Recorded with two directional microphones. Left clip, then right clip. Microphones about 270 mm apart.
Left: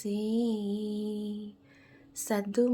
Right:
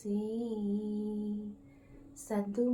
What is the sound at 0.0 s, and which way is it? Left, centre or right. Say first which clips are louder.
Female singing: left 3 dB; left.